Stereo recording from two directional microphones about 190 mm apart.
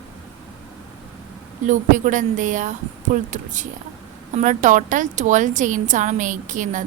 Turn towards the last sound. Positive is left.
turn(degrees=-40)  # may be behind; listen again after turning